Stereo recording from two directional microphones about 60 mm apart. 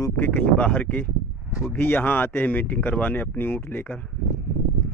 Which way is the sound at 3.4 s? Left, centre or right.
Left.